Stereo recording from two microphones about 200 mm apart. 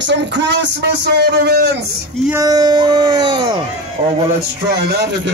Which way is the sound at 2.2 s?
15° right (ahead or behind).